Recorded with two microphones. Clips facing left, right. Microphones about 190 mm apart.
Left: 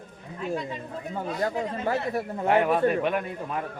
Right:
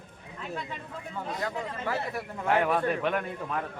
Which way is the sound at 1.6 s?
30° left (ahead or behind).